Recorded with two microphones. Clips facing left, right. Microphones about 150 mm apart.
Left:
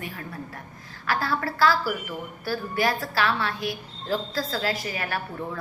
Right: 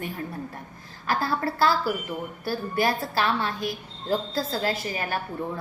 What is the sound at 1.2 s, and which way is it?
A woman's voice, 25° right (ahead or behind).